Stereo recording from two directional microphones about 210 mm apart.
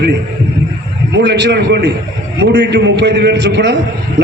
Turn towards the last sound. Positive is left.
turn(degrees=-55)  # may be behind; listen again after turning